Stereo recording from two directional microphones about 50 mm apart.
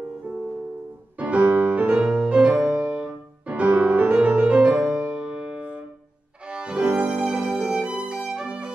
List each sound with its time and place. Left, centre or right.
1.1 s piano: right
2.3 s music: right
5.4 s piano: right
6.5 s violin: right